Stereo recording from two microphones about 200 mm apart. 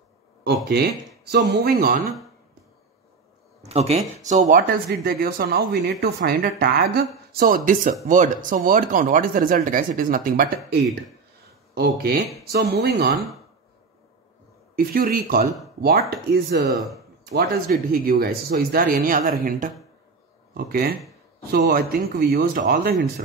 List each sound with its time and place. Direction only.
0.4 s speech: 50° right (ahead or behind)
3.6 s speech: 30° right (ahead or behind); by 13.2 s 50° right (ahead or behind)
14.8 s speech: 45° right (ahead or behind)